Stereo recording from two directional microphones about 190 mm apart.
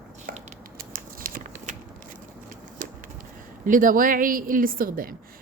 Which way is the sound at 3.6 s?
45° right (ahead or behind).